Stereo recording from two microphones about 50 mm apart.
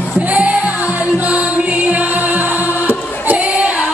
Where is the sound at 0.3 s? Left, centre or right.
Right.